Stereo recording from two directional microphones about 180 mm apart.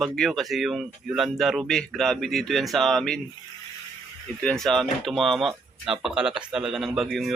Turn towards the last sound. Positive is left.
turn(degrees=0)  # may be behind; listen again after turning